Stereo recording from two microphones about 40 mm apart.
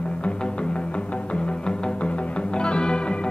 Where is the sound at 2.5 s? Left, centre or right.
Left.